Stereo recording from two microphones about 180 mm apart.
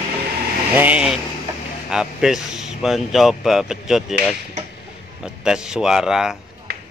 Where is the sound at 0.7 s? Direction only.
10° right (ahead or behind).